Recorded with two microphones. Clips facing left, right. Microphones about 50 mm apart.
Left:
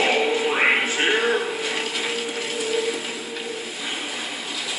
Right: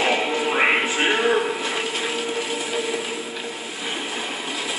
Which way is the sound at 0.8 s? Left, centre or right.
Right.